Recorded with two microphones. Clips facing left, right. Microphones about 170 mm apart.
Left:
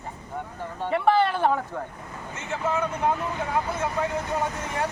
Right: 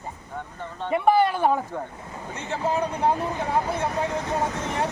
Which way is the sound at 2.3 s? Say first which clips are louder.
Right 2 dB; 35° right (ahead or behind).